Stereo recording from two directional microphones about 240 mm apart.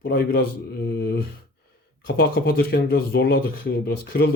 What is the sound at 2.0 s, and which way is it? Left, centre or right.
A man's voice, left.